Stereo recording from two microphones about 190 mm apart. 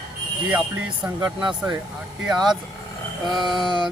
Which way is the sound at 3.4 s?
25° right (ahead or behind).